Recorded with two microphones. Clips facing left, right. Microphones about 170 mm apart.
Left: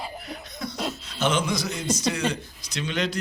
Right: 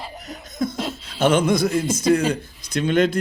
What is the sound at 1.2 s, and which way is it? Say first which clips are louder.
Speech: right 7 dB; 55° right (ahead or behind).